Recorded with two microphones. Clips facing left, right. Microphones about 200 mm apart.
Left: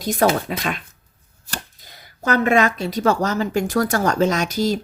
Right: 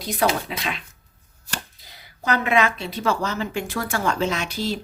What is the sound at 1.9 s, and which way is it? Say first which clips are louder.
A woman's voice: left 3 dB; 45° left (ahead or behind).